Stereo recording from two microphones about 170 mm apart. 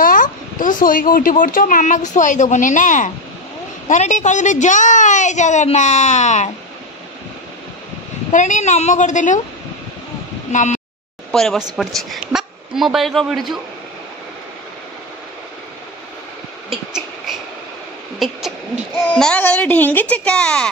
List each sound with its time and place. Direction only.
0.0 s a woman's voice: 50° left (ahead or behind)
8.3 s a woman's voice: 45° left (ahead or behind)
10.5 s speech: 45° left (ahead or behind)
11.3 s a woman's voice: centre (ahead or behind)
18.2 s speech: centre (ahead or behind)